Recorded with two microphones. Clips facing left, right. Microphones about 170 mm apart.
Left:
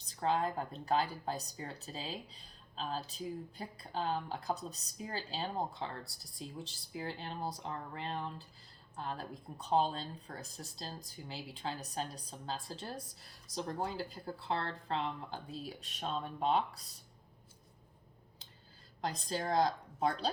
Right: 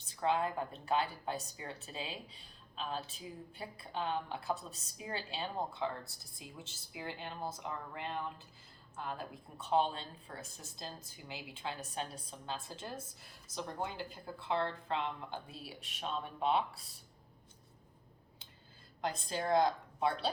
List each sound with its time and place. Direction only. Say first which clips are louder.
0.0 s a woman's voice: even; 35° left (ahead or behind)
19.0 s a woman's voice: right 1 dB; 40° left (ahead or behind)